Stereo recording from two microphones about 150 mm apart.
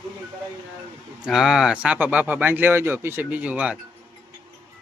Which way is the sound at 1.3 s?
Centre (ahead or behind).